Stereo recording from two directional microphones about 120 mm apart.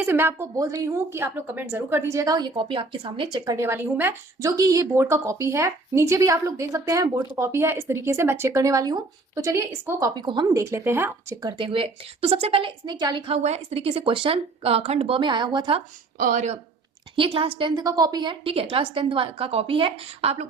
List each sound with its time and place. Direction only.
0.0 s a woman's voice: 15° right (ahead or behind)
0.5 s speech: 30° right (ahead or behind)
3.5 s speech: 20° right (ahead or behind)
4.4 s speech: 30° right (ahead or behind)
10.2 s speech: 40° right (ahead or behind)
10.6 s speech: 20° right (ahead or behind)
11.4 s a woman's voice: 45° right (ahead or behind)
13.2 s a woman's voice: 65° right (ahead or behind); by 15.8 s 40° right (ahead or behind)
16.1 s speech: 90° right
17.2 s a woman's voice: 50° right (ahead or behind)